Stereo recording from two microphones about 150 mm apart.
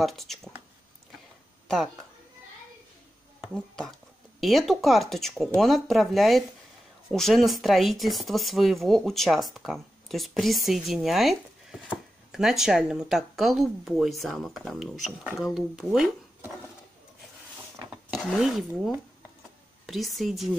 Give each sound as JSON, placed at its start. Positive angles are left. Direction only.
{"t": 0.0, "sound": "speech", "side_deg": 0}
{"t": 3.3, "sound": "speech", "side_deg": 5}
{"t": 18.1, "sound": "speech", "side_deg": 0}